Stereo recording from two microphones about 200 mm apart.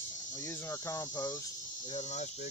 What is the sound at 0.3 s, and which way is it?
Speech, 10° left (ahead or behind).